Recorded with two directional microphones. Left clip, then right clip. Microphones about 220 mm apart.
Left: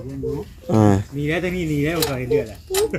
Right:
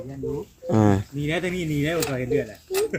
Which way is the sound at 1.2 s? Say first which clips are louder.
Left 3 dB; 55° right (ahead or behind).